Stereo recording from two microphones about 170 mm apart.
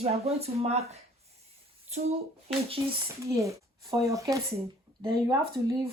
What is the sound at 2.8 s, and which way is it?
Speech, 20° right (ahead or behind).